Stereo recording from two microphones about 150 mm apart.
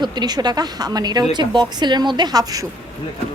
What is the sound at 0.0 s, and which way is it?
A woman's voice, 30° right (ahead or behind).